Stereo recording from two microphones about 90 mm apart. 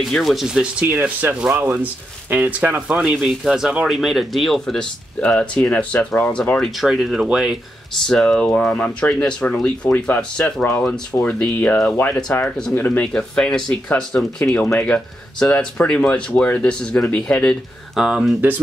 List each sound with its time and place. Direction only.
0.0 s speech: centre (ahead or behind); by 3.0 s 20° right (ahead or behind)
3.0 s speech: 10° right (ahead or behind); by 6.6 s 15° left (ahead or behind)
6.6 s speech: 5° right (ahead or behind)
7.9 s speech: 5° left (ahead or behind)
13.1 s speech: 5° left (ahead or behind)
18.0 s speech: 5° right (ahead or behind)